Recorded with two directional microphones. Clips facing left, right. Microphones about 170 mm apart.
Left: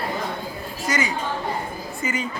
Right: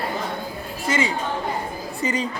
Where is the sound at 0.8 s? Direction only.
30° right (ahead or behind).